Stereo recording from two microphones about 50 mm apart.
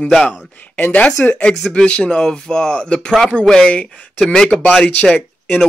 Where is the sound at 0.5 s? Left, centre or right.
Left.